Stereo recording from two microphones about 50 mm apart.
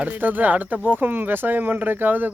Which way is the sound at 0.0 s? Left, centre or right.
Right.